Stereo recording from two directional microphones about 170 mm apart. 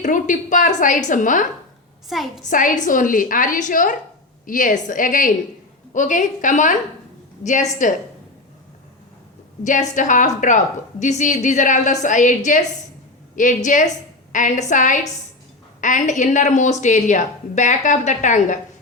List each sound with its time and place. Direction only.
0.0 s a woman's voice: 45° left (ahead or behind)
2.0 s a woman's voice: centre (ahead or behind)
2.5 s a woman's voice: 50° left (ahead or behind)
9.6 s a woman's voice: 50° left (ahead or behind)
13.3 s a woman's voice: 50° left (ahead or behind)